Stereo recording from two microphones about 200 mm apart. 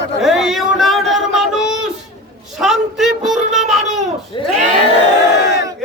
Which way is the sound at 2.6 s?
Centre (ahead or behind).